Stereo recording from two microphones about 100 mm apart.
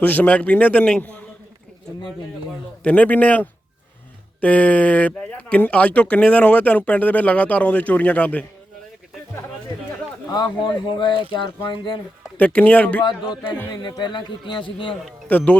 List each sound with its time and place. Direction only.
0.0 s speech: 15° left (ahead or behind)
2.8 s speech: 15° left (ahead or behind)
10.3 s speech: 45° left (ahead or behind)
12.4 s speech: 15° left (ahead or behind)
13.7 s speech: 40° left (ahead or behind)
15.3 s speech: 15° left (ahead or behind)